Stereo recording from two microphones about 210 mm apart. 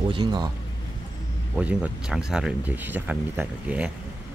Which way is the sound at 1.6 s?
5° right (ahead or behind).